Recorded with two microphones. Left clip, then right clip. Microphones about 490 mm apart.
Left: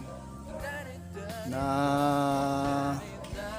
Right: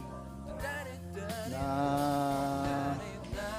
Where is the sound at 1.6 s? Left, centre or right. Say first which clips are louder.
Left 5 dB; right.